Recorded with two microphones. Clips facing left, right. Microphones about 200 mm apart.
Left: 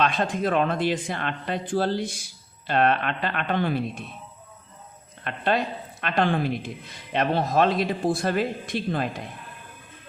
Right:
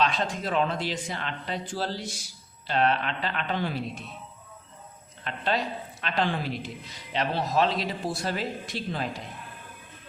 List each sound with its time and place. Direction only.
0.0 s speech: 55° left (ahead or behind)
5.2 s a woman's voice: 55° left (ahead or behind)